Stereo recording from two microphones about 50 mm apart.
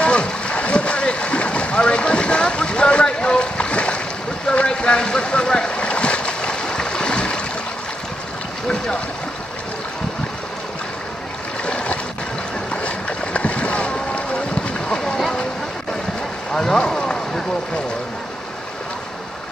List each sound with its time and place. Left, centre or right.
0.0 s boat: left
11.6 s stream: left
12.7 s boat: left
15.0 s a sound: centre
16.5 s vehicle: centre